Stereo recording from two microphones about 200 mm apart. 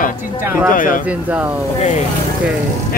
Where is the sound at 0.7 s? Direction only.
45° left (ahead or behind).